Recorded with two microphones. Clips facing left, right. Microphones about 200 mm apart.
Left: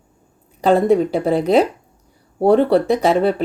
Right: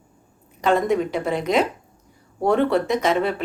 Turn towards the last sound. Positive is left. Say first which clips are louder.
# left 5 dB
turn(degrees=35)  # may be behind; listen again after turning